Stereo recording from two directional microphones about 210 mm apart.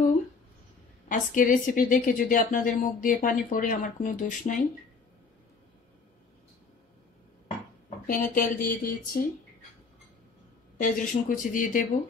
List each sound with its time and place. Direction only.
1.0 s a woman's voice: 40° left (ahead or behind)
8.1 s speech: 40° left (ahead or behind)
10.8 s a woman's voice: 40° left (ahead or behind)